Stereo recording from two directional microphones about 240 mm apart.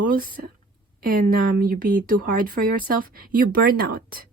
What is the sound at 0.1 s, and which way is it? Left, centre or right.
Speech, right.